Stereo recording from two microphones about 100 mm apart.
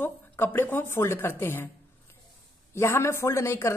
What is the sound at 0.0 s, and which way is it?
A woman's voice, 20° left (ahead or behind).